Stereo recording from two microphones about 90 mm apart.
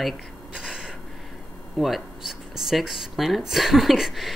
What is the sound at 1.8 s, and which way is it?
Speech, centre (ahead or behind).